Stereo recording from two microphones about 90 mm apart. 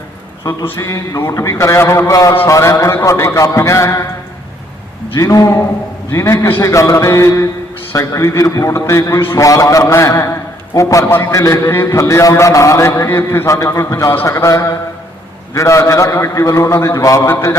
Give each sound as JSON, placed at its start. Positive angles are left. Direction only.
{"t": 0.4, "sound": "a man's voice", "side_deg": 35}
{"t": 5.1, "sound": "a man's voice", "side_deg": 40}